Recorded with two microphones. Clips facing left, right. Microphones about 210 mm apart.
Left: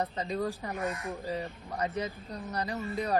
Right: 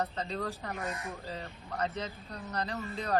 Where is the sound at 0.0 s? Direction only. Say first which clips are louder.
Left 3 dB; 15° left (ahead or behind).